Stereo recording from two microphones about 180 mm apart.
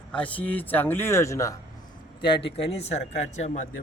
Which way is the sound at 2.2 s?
30° left (ahead or behind).